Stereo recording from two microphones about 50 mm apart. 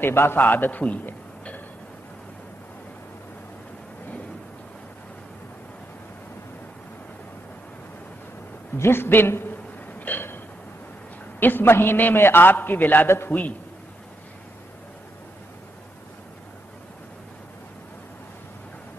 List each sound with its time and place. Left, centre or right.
0.0 s a man's voice: left
0.4 s a man's voice: left
8.7 s a sound: left
11.3 s a man's voice: left